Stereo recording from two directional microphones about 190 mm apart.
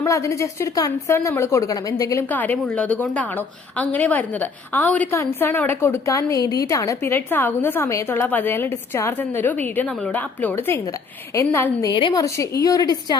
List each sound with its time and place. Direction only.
0.0 s a woman's voice: 15° left (ahead or behind)